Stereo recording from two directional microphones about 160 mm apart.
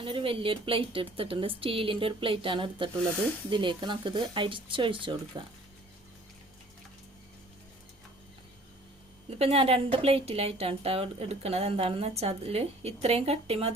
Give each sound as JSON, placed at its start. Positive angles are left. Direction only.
{"t": 0.0, "sound": "a woman's voice", "side_deg": -35}
{"t": 9.4, "sound": "a woman's voice", "side_deg": -40}